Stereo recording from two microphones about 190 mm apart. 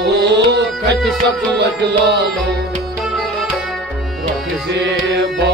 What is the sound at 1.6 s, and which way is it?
Music, 60° right (ahead or behind).